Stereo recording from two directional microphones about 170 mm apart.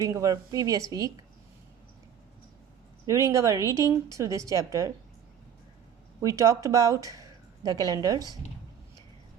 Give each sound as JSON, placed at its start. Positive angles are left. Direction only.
{"t": 0.0, "sound": "a woman's voice", "side_deg": -20}
{"t": 3.1, "sound": "speech", "side_deg": -20}
{"t": 6.2, "sound": "speech", "side_deg": -20}